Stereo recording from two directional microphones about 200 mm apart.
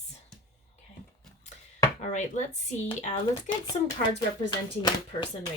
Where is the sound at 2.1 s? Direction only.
35° left (ahead or behind).